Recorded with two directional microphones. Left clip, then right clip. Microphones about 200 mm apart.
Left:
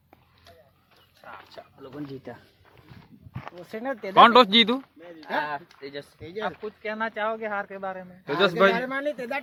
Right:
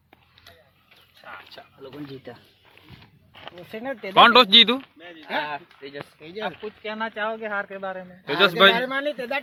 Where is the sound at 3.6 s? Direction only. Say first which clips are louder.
Even; 5° right (ahead or behind).